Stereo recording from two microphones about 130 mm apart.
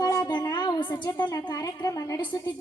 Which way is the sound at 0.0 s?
30° left (ahead or behind).